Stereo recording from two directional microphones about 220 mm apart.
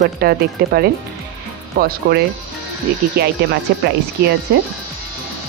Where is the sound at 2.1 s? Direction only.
50° right (ahead or behind).